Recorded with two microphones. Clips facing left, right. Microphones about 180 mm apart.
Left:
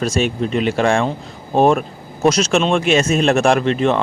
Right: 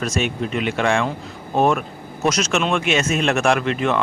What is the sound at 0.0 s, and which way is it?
Speech, 30° left (ahead or behind).